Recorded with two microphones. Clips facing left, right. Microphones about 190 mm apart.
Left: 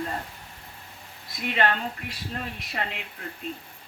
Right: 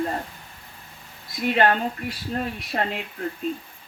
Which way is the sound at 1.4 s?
40° right (ahead or behind).